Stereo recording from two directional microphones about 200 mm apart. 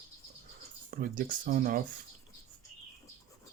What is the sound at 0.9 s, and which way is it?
Speech, 45° right (ahead or behind).